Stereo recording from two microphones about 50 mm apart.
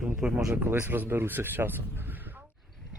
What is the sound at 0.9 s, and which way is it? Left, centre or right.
Speech, right.